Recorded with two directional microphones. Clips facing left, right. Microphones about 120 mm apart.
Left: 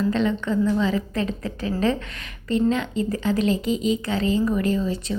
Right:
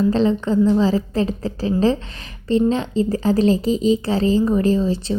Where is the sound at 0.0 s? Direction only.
30° right (ahead or behind).